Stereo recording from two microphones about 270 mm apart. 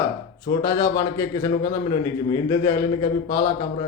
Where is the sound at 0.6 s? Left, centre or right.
Centre.